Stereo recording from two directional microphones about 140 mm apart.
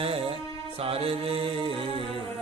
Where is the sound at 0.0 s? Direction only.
45° right (ahead or behind).